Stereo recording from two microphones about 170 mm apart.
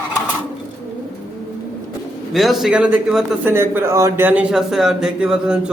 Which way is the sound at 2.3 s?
Centre (ahead or behind).